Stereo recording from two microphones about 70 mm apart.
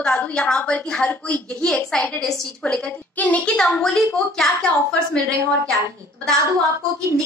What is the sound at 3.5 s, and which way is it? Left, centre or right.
A woman's voice, centre.